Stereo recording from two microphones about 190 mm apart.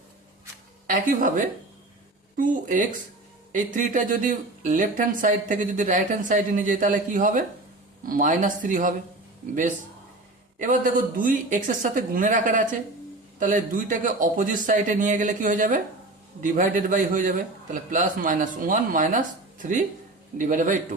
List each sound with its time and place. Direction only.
0.9 s speech: 45° right (ahead or behind)
10.6 s speech: 45° right (ahead or behind)